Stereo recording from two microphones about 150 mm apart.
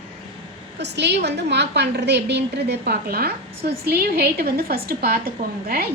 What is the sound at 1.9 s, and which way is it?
A woman's voice, 90° right.